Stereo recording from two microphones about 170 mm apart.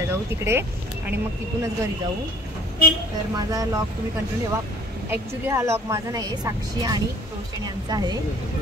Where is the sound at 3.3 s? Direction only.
20° right (ahead or behind).